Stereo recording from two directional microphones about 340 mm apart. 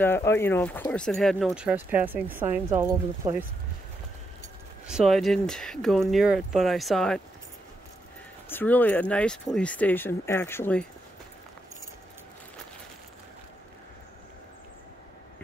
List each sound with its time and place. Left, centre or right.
0.0 s speech: centre
4.8 s speech: centre
8.5 s speech: centre